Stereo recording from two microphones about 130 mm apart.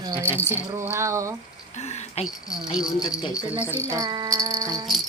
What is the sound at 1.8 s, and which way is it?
Speech, 55° left (ahead or behind).